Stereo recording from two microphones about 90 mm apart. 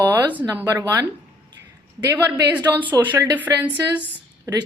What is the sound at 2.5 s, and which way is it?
Speech, 20° right (ahead or behind).